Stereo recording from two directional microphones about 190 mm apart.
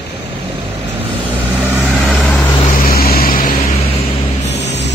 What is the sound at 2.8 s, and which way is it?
Vehicle, 50° left (ahead or behind).